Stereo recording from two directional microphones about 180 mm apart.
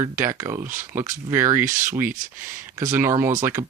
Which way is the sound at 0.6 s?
45° right (ahead or behind).